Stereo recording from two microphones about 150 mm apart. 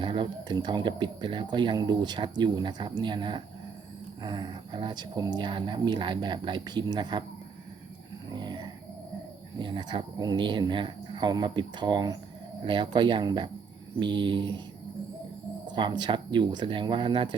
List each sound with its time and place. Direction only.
0.0 s speech: 35° right (ahead or behind)
8.3 s a sound: 30° right (ahead or behind)
9.6 s speech: 30° right (ahead or behind)
15.6 s speech: 30° right (ahead or behind)